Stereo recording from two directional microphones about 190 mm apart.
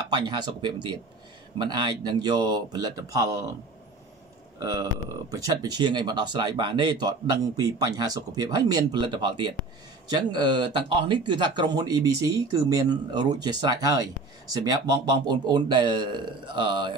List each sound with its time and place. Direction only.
0.1 s speech: 25° right (ahead or behind)
4.6 s speech: 15° right (ahead or behind)
15.2 s speech: 25° right (ahead or behind)